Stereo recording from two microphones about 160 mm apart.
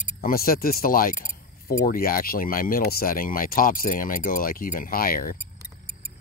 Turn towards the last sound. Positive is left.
turn(degrees=65)  # may be behind; listen again after turning